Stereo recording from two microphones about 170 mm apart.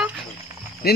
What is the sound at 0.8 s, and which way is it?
Speech, 65° left (ahead or behind).